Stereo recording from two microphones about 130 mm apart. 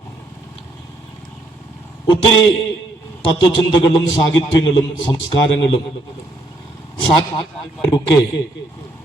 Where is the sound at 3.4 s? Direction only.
40° left (ahead or behind).